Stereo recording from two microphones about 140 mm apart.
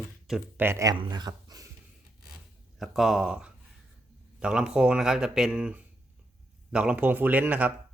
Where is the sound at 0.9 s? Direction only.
35° right (ahead or behind).